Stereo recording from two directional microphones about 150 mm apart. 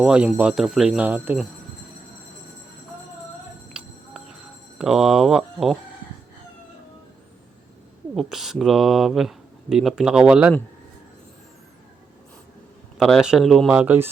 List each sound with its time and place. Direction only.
0.0 s speech: 5° right (ahead or behind)
3.7 s music: 5° right (ahead or behind)
4.8 s speech: 5° right (ahead or behind)
8.1 s speech: centre (ahead or behind)
13.0 s speech: centre (ahead or behind)